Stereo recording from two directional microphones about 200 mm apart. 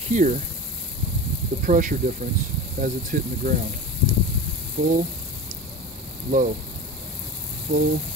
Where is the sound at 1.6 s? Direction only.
40° right (ahead or behind).